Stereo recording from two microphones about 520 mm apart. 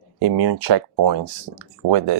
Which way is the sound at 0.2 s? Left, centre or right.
Right.